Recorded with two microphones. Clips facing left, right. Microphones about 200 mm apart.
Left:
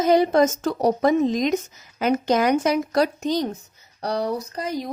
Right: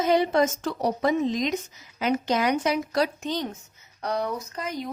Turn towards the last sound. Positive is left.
turn(degrees=35)  # may be behind; listen again after turning